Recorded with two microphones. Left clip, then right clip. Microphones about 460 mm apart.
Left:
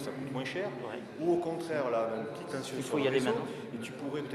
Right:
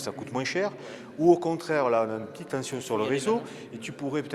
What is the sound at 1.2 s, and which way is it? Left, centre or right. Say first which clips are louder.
Speech: right 9 dB; right.